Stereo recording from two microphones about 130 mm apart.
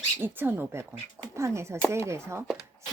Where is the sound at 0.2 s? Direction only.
15° right (ahead or behind).